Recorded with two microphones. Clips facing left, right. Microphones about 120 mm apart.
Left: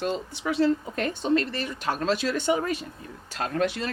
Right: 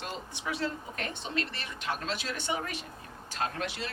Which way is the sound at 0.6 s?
40° left (ahead or behind).